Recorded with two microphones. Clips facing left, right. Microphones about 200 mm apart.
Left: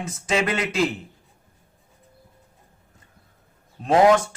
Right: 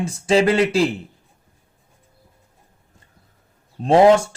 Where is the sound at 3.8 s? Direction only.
25° right (ahead or behind).